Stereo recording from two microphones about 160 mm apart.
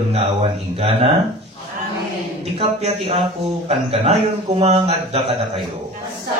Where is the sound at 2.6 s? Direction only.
40° right (ahead or behind).